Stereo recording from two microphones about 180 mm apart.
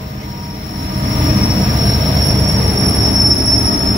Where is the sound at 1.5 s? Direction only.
20° right (ahead or behind).